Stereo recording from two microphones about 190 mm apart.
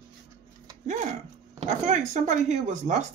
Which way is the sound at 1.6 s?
40° right (ahead or behind).